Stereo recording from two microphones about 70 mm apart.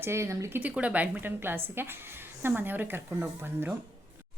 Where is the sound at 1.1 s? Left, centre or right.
Right.